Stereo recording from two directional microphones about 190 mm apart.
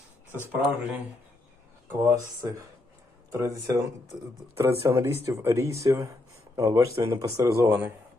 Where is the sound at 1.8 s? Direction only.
15° right (ahead or behind).